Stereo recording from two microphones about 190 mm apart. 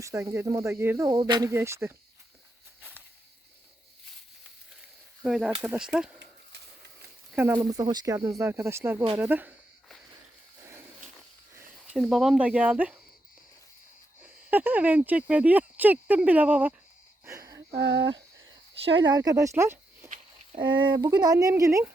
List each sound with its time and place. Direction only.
0.0 s speech: 15° right (ahead or behind)
5.2 s speech: 5° right (ahead or behind)
7.5 s speech: 20° right (ahead or behind)
11.9 s speech: centre (ahead or behind)
14.5 s speech: 10° right (ahead or behind)
17.2 s wheeze: 15° right (ahead or behind)
17.7 s speech: 65° right (ahead or behind)
18.9 s speech: 20° right (ahead or behind)
20.6 s speech: 25° right (ahead or behind)